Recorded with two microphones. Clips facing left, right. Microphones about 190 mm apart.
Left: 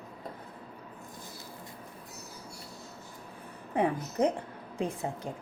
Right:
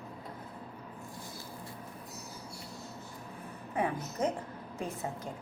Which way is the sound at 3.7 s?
30° left (ahead or behind).